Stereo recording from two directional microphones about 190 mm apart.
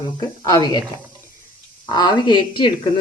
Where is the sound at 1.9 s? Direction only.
20° left (ahead or behind).